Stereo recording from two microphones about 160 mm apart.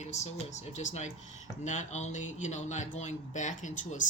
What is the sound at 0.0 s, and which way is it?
Speech, 45° left (ahead or behind).